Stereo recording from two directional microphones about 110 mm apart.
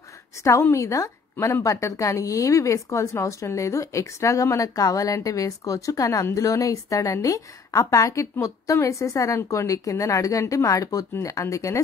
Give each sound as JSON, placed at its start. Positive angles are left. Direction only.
{"t": 0.4, "sound": "a woman's voice", "side_deg": 25}